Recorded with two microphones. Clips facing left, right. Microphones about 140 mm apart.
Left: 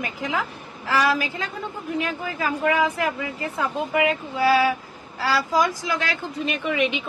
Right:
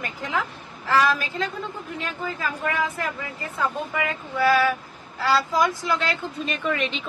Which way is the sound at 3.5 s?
20° left (ahead or behind).